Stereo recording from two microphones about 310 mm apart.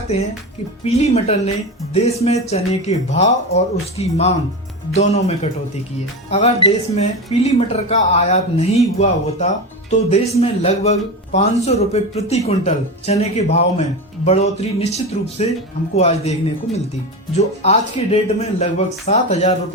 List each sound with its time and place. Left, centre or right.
0.9 s speech: left
17.3 s speech: centre